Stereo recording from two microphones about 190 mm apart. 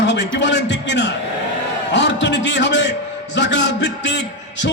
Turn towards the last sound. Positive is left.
turn(degrees=65)  # may be behind; listen again after turning